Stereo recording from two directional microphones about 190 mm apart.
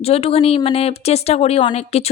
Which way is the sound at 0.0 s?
30° left (ahead or behind).